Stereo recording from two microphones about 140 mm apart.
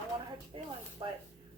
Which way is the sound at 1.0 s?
35° right (ahead or behind).